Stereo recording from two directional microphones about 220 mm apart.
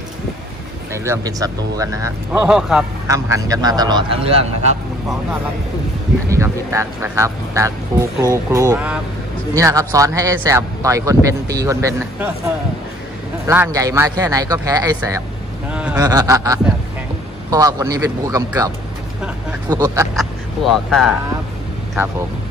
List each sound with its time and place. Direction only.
0.9 s speech: 15° right (ahead or behind)
2.3 s speech: 5° right (ahead or behind)
3.1 s speech: 15° right (ahead or behind)
6.3 s speech: 10° right (ahead or behind)
13.5 s speech: 10° right (ahead or behind)
15.7 s a sound: 5° right (ahead or behind)
16.0 s speech: 15° right (ahead or behind)
19.7 s speech: 15° right (ahead or behind)
20.2 s speech: centre (ahead or behind)